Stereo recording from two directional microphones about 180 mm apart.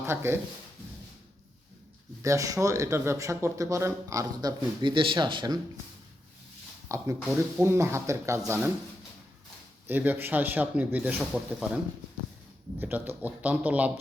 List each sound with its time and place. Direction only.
0.0 s speech: 15° right (ahead or behind)
2.2 s speech: 20° right (ahead or behind)
6.8 s speech: 15° right (ahead or behind)
9.8 s speech: 10° right (ahead or behind)
12.8 s speech: 10° right (ahead or behind)